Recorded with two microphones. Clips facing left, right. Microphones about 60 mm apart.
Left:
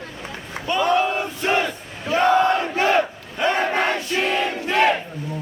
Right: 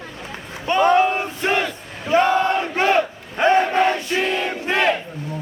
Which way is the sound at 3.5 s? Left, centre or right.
Left.